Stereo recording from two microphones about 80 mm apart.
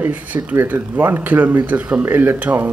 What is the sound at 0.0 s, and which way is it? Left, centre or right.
Speech, centre.